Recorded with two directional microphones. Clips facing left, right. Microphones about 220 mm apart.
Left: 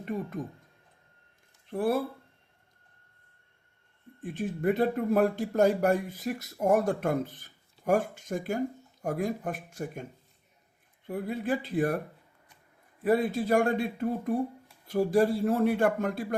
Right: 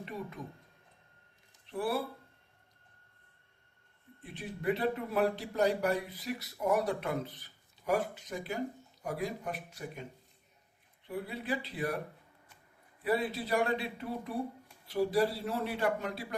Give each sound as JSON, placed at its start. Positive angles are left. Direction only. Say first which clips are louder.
{"t": 0.0, "sound": "speech", "louder": "left 8 dB", "side_deg": 50}
{"t": 1.6, "sound": "speech", "louder": "left 6 dB", "side_deg": 50}
{"t": 4.2, "sound": "speech", "louder": "left 10 dB", "side_deg": 45}
{"t": 13.0, "sound": "speech", "louder": "left 6 dB", "side_deg": 45}